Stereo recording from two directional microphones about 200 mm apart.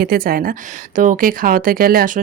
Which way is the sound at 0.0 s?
50° right (ahead or behind).